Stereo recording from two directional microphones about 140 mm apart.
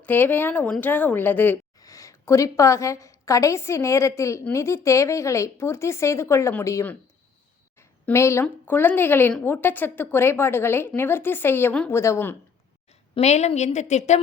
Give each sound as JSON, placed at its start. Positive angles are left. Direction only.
{"t": 0.0, "sound": "a woman's voice", "side_deg": 15}
{"t": 12.9, "sound": "a woman's voice", "side_deg": 50}